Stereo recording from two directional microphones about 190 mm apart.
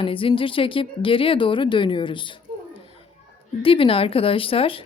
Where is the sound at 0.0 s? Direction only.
30° left (ahead or behind).